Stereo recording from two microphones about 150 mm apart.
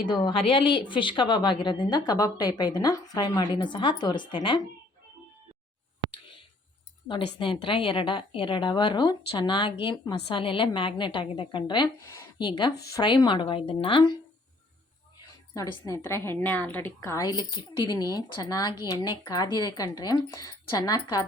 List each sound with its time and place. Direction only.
0.0 s a woman's voice: 30° left (ahead or behind)
7.1 s a woman's voice: 35° left (ahead or behind)
12.0 s a sound: 20° left (ahead or behind)
12.4 s a woman's voice: 30° left (ahead or behind)
15.5 s a woman's voice: 20° left (ahead or behind)